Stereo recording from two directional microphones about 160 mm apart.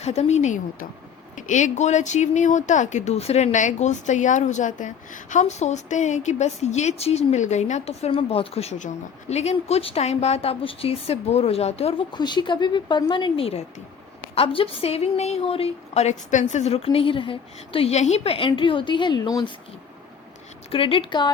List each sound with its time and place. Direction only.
0.0 s a woman's voice: 45° left (ahead or behind); by 19.5 s 25° left (ahead or behind)
20.7 s a woman's voice: 35° left (ahead or behind)